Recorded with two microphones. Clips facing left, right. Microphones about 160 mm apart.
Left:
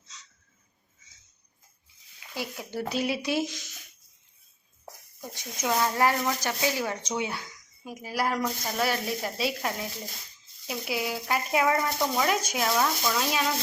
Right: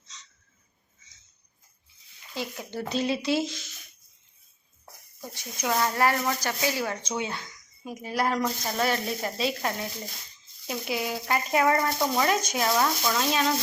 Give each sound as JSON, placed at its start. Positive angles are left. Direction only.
{"t": 2.3, "sound": "speech", "side_deg": 10}
{"t": 5.3, "sound": "speech", "side_deg": 20}